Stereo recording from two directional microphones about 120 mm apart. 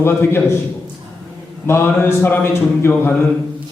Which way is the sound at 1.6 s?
20° left (ahead or behind).